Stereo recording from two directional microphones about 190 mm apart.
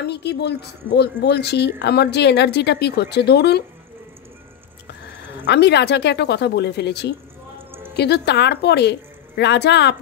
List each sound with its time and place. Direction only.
0.0 s speech: 60° left (ahead or behind)
5.1 s speech: 65° left (ahead or behind)